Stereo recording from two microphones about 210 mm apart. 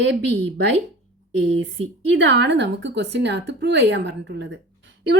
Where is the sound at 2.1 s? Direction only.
60° right (ahead or behind).